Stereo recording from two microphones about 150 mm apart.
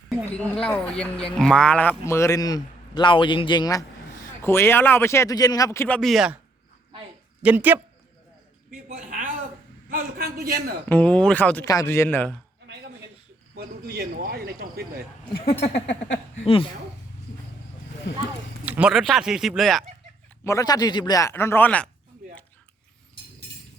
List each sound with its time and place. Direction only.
0.1 s a sound: centre (ahead or behind)
0.5 s a man's voice: 5° left (ahead or behind)
6.0 s speech: centre (ahead or behind)
7.4 s speech: 10° right (ahead or behind)
9.0 s a sound: 60° right (ahead or behind)
9.9 s a man's voice: 85° right
10.8 s speech: 10° left (ahead or behind)
11.6 s speech: 25° left (ahead or behind)
13.6 s speech: 90° right
15.4 s speech: 45° left (ahead or behind)
18.6 s speech: 10° right (ahead or behind)
20.4 s a man's voice: 20° left (ahead or behind)